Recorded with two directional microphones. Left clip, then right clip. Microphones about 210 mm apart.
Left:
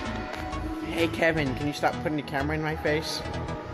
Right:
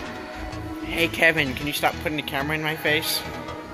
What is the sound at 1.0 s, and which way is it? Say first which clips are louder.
Speech: right 5 dB; 10° right (ahead or behind).